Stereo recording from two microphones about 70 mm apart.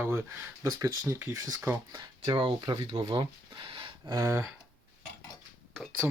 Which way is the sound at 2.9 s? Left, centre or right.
Right.